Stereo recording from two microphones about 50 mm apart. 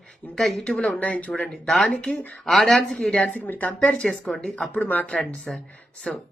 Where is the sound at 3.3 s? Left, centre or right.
Left.